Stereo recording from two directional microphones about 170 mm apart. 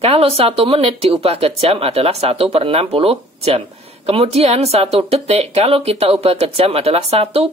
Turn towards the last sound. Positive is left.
turn(degrees=-35)  # may be behind; listen again after turning